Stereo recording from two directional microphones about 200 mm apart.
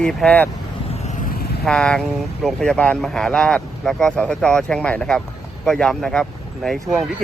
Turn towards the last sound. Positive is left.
turn(degrees=0)  # may be behind; listen again after turning